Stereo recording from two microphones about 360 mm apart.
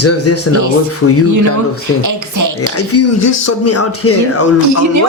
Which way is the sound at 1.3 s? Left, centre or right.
Right.